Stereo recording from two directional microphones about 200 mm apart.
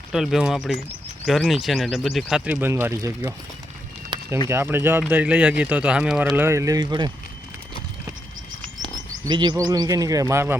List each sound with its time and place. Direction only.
0.1 s speech: centre (ahead or behind)
4.1 s run: 25° right (ahead or behind)
4.4 s speech: 10° right (ahead or behind)
9.2 s speech: 20° right (ahead or behind)